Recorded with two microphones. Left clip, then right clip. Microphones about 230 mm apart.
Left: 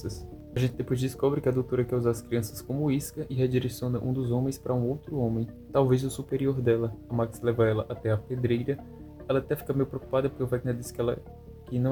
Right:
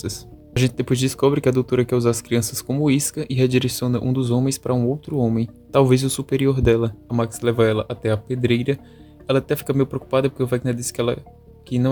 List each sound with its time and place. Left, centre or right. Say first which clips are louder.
0.0 s speech: right 8 dB; right